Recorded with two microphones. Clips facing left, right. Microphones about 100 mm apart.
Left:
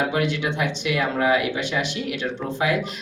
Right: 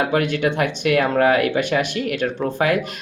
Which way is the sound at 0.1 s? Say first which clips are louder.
Right 4 dB; 55° right (ahead or behind).